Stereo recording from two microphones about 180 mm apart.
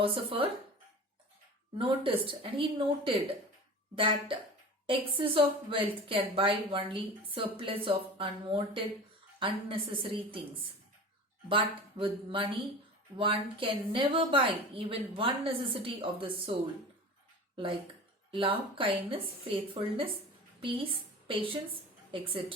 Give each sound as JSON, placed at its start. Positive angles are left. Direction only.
{"t": 0.0, "sound": "speech", "side_deg": -30}
{"t": 1.8, "sound": "a woman's voice", "side_deg": -30}
{"t": 11.4, "sound": "a woman's voice", "side_deg": -30}
{"t": 18.3, "sound": "a woman's voice", "side_deg": -30}